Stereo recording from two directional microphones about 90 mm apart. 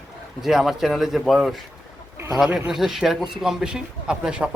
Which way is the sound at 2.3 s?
10° right (ahead or behind).